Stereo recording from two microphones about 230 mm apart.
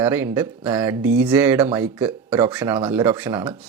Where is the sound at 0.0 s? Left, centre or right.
Centre.